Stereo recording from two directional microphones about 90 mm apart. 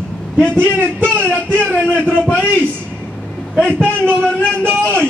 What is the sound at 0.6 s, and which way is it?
Speech, 20° right (ahead or behind).